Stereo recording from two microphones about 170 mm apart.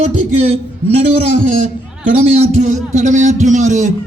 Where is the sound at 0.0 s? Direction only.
40° right (ahead or behind).